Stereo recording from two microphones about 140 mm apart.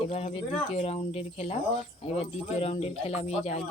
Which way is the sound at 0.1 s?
50° left (ahead or behind).